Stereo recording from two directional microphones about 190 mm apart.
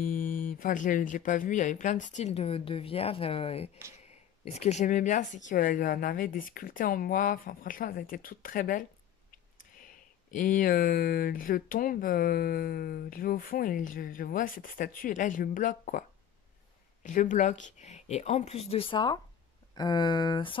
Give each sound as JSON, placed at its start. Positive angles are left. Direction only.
{"t": 0.0, "sound": "speech", "side_deg": 45}